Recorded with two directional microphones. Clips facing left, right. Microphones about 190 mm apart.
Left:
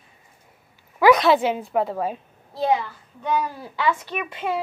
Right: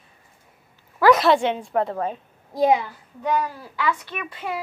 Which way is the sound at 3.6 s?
25° left (ahead or behind).